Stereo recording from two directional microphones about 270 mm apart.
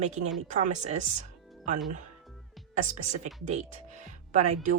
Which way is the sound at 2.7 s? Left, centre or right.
Right.